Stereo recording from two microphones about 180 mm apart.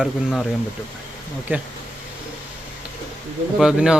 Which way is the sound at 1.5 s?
10° right (ahead or behind).